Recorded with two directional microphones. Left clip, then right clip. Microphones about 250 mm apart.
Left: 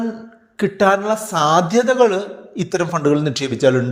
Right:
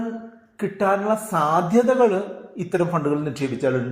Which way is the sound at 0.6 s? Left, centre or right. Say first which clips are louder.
Left 6 dB; left.